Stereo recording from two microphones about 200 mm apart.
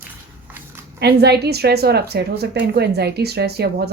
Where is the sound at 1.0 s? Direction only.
55° right (ahead or behind).